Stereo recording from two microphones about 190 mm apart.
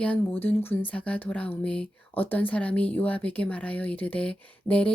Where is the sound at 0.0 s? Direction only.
10° left (ahead or behind).